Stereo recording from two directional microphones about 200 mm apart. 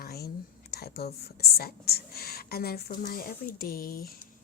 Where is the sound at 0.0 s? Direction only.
50° left (ahead or behind).